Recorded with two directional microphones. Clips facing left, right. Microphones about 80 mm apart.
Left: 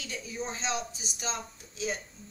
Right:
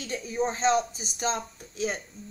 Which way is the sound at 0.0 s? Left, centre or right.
Right.